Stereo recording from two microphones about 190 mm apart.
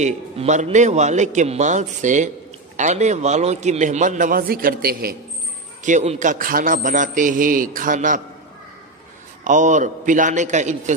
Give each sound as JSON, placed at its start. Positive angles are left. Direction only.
{"t": 0.0, "sound": "a man's voice", "side_deg": -40}
{"t": 5.9, "sound": "a man's voice", "side_deg": -40}
{"t": 9.4, "sound": "a man's voice", "side_deg": -40}